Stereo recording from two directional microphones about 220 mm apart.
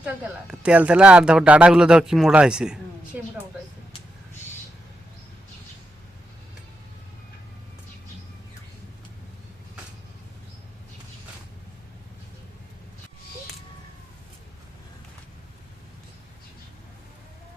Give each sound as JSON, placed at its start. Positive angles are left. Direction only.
{"t": 0.0, "sound": "speech", "side_deg": -5}